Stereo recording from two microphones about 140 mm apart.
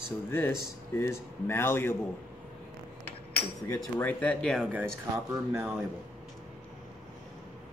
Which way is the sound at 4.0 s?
10° left (ahead or behind).